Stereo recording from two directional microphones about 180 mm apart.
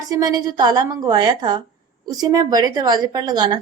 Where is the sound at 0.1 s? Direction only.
20° right (ahead or behind).